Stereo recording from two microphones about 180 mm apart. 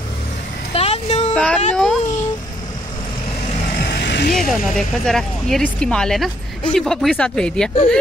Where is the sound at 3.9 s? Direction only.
70° left (ahead or behind).